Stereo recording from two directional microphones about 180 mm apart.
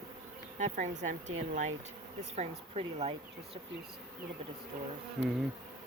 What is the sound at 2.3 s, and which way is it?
Speech, 35° right (ahead or behind).